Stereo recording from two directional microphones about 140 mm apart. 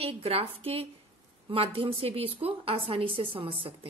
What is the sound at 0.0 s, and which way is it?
A woman's voice, 45° right (ahead or behind).